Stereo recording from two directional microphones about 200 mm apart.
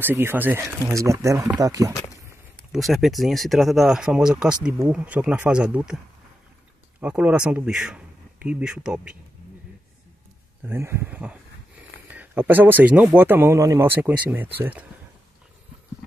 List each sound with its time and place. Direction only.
0.0 s speech: 10° right (ahead or behind)
2.7 s speech: centre (ahead or behind)
7.0 s a man's voice: 5° right (ahead or behind)
10.6 s speech: 10° right (ahead or behind)